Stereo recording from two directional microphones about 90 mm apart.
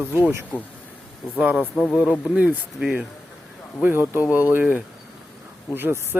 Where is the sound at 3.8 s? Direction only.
20° right (ahead or behind).